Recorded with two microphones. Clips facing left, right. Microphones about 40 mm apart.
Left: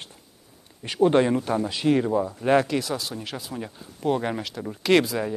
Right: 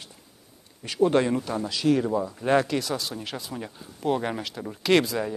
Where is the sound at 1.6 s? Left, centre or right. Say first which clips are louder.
Right 1 dB; left.